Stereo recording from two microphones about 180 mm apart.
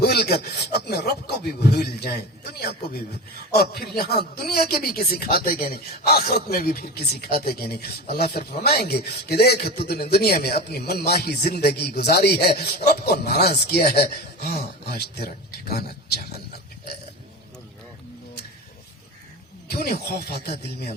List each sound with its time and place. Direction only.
0.0 s a man's voice: 60° left (ahead or behind)
19.6 s a man's voice: 60° left (ahead or behind)